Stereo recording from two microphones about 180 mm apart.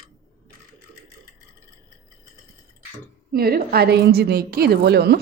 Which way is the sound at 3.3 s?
55° right (ahead or behind).